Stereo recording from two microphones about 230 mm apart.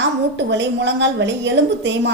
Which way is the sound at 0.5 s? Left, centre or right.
Right.